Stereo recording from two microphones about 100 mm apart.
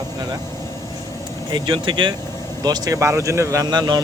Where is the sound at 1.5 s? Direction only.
55° right (ahead or behind).